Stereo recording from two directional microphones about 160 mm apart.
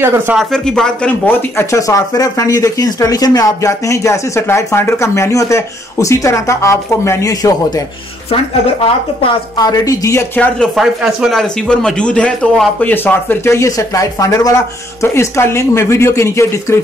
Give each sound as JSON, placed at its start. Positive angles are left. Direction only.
{"t": 0.0, "sound": "speech", "side_deg": -15}
{"t": 0.4, "sound": "speech", "side_deg": 5}
{"t": 9.2, "sound": "speech", "side_deg": 25}
{"t": 10.8, "sound": "speech", "side_deg": 0}